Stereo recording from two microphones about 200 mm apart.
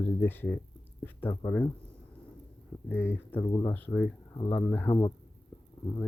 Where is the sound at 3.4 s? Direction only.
20° left (ahead or behind).